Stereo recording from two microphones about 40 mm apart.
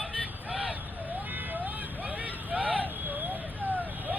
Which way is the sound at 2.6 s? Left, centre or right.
Right.